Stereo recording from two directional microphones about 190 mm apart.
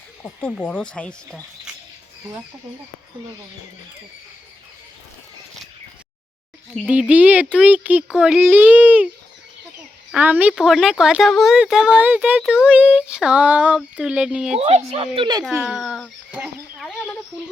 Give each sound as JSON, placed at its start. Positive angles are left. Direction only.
{"t": 0.2, "sound": "speech", "side_deg": 10}
{"t": 6.8, "sound": "a child's voice", "side_deg": -5}
{"t": 10.1, "sound": "speech", "side_deg": -10}
{"t": 14.6, "sound": "speech", "side_deg": -35}
{"t": 15.6, "sound": "speech", "side_deg": 0}